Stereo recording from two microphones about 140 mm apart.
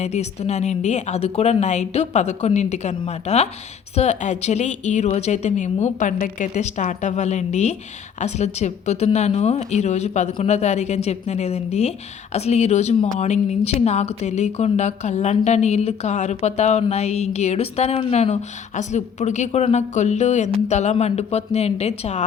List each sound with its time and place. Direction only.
0.0 s a woman's voice: 50° left (ahead or behind)